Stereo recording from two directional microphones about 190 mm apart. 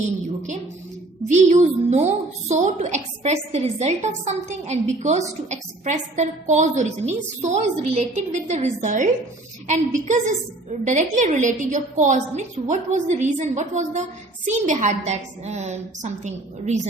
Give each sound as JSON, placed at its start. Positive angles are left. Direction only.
{"t": 1.3, "sound": "a woman's voice", "side_deg": -40}